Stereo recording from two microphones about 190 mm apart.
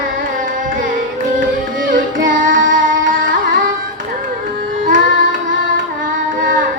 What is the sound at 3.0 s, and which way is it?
Carnatic music, 75° right (ahead or behind).